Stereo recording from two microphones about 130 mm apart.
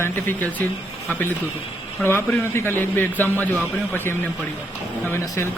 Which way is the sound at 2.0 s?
15° left (ahead or behind).